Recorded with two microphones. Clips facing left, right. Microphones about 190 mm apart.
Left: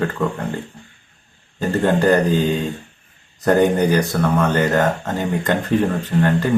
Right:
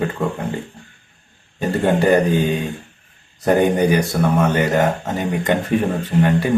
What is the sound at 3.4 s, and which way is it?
Speech, 15° right (ahead or behind).